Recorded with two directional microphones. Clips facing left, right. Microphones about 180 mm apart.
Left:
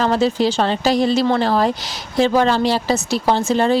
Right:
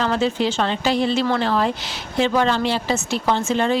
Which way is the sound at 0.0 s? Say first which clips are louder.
Left 4 dB; 35° left (ahead or behind).